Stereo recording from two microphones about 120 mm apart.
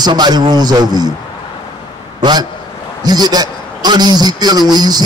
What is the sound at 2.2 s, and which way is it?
A man's voice, 35° right (ahead or behind).